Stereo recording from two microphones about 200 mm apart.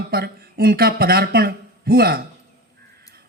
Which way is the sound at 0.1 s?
50° right (ahead or behind).